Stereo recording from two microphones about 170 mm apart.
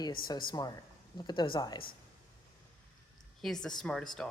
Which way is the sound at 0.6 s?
25° left (ahead or behind).